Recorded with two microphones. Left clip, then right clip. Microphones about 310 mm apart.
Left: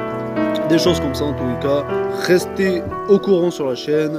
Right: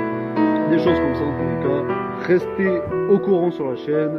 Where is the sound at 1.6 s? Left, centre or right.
Centre.